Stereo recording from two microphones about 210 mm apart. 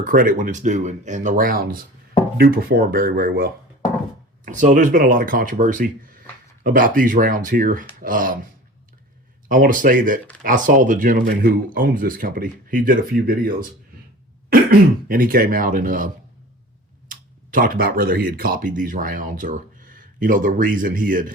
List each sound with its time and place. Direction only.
0.0 s speech: 40° right (ahead or behind)
9.5 s speech: 40° right (ahead or behind)